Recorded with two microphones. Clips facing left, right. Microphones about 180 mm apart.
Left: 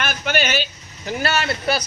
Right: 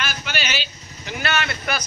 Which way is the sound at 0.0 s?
50° left (ahead or behind).